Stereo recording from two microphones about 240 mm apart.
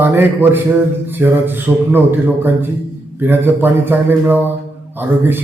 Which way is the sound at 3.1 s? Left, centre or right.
Centre.